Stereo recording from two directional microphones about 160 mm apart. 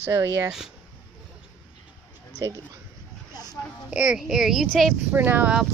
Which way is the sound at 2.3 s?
25° right (ahead or behind).